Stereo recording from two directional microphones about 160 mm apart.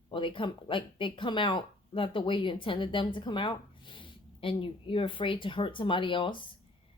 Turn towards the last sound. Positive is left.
turn(degrees=30)  # may be behind; listen again after turning